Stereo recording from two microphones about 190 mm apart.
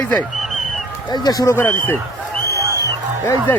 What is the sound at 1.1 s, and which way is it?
Speech, 20° left (ahead or behind).